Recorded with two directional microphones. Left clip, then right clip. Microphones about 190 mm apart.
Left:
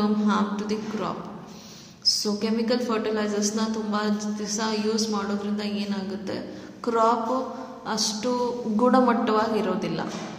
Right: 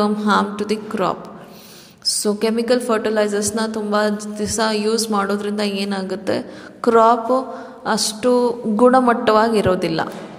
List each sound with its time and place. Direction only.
0.0 s a woman's voice: 45° right (ahead or behind)
2.1 s a woman's voice: 45° right (ahead or behind)